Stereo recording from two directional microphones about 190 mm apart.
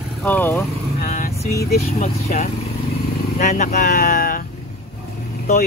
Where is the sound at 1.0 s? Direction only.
50° left (ahead or behind).